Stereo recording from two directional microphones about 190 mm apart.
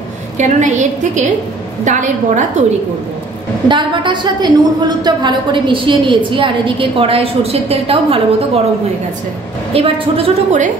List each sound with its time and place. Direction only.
0.4 s a woman's voice: 40° right (ahead or behind)
3.6 s a woman's voice: 25° right (ahead or behind)
9.8 s a woman's voice: 30° right (ahead or behind)